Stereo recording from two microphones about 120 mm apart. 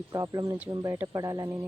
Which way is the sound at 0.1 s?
30° right (ahead or behind).